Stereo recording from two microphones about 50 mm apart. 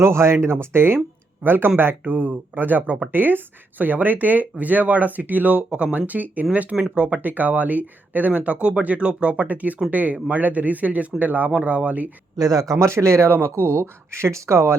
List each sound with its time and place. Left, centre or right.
0.0 s speech: right
8.5 s speech: right
12.5 s speech: right
13.3 s speech: right